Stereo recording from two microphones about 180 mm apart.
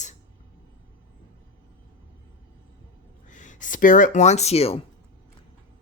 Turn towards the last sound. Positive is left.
turn(degrees=35)  # may be behind; listen again after turning